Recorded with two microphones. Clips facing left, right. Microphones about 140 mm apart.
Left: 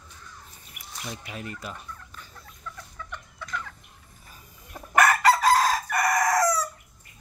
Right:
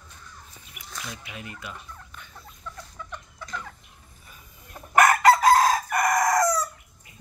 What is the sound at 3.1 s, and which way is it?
Chicken, 15° right (ahead or behind).